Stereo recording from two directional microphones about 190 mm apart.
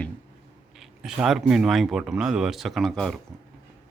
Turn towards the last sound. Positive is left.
turn(degrees=0)  # may be behind; listen again after turning